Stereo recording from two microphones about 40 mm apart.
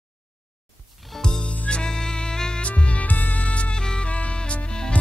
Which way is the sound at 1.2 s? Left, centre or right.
Centre.